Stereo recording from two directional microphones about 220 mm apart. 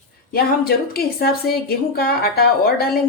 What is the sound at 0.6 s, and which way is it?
A woman's voice, 45° left (ahead or behind).